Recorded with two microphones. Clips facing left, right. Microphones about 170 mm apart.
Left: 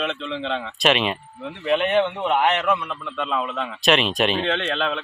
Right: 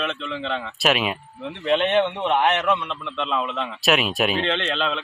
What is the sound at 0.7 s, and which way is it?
Speech, 5° right (ahead or behind).